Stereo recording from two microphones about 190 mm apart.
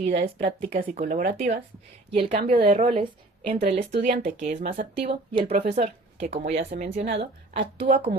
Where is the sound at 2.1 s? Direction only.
30° right (ahead or behind).